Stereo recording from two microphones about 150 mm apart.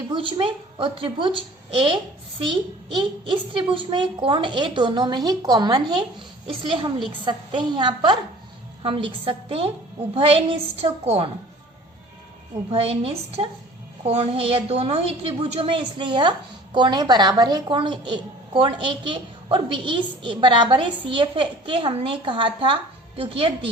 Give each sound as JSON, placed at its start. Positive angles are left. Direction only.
{"t": 0.1, "sound": "a woman's voice", "side_deg": -35}
{"t": 12.7, "sound": "a woman's voice", "side_deg": -40}